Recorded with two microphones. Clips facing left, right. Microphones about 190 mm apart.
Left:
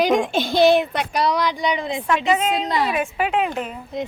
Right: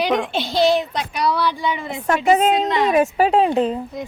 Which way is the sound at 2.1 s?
40° right (ahead or behind).